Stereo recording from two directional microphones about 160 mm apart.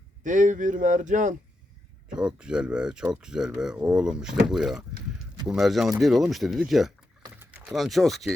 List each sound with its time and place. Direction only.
0.3 s speech: 50° right (ahead or behind)
2.1 s speech: 5° right (ahead or behind)
7.3 s typing: 10° right (ahead or behind)
7.8 s speech: centre (ahead or behind)